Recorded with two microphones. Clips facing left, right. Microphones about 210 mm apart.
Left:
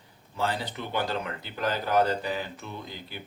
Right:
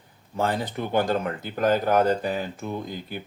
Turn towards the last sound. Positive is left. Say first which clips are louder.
# right 8 dB
turn(degrees=-50)  # may be behind; listen again after turning